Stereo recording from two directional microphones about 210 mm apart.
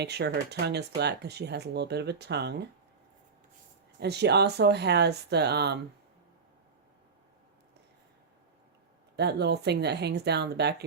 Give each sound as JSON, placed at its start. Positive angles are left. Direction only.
{"t": 0.0, "sound": "speech", "side_deg": -50}
{"t": 4.0, "sound": "speech", "side_deg": -50}
{"t": 9.1, "sound": "speech", "side_deg": -50}